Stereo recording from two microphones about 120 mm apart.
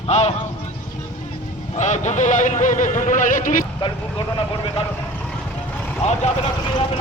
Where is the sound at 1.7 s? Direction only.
90° left.